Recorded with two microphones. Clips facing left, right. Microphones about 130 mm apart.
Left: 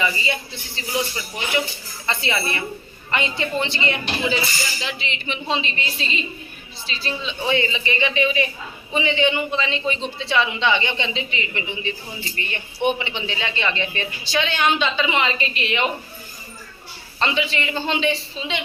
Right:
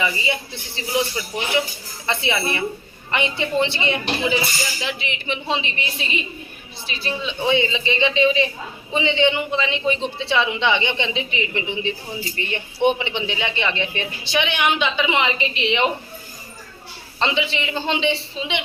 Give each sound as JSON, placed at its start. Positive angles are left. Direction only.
{"t": 0.0, "sound": "speech", "side_deg": -15}
{"t": 2.0, "sound": "a man's voice", "side_deg": -20}
{"t": 17.2, "sound": "a man's voice", "side_deg": -20}